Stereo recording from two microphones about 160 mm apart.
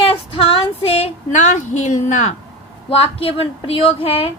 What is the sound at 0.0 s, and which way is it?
Female singing, 35° left (ahead or behind).